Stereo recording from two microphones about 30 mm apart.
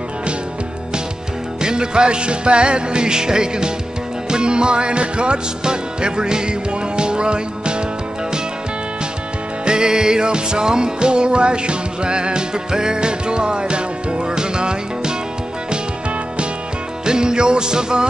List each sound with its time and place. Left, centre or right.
1.6 s music: right
9.7 s music: right
17.0 s music: right